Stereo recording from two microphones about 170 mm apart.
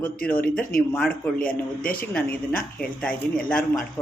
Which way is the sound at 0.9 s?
5° left (ahead or behind).